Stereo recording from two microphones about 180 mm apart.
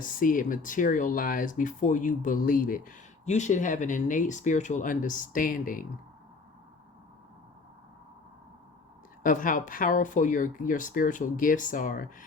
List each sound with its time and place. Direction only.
0.0 s speech: 50° left (ahead or behind)
9.2 s speech: 45° left (ahead or behind)